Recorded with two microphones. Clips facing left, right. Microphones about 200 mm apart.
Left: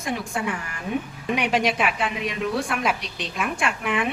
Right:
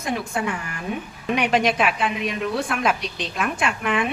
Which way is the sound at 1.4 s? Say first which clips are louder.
Right 3 dB; 10° left (ahead or behind).